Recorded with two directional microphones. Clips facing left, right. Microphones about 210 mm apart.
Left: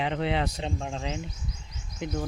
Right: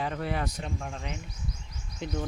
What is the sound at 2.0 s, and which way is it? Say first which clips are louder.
Speech: left 2 dB; 10° left (ahead or behind).